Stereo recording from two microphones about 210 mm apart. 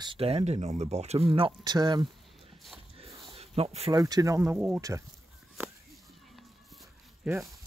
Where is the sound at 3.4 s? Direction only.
30° right (ahead or behind).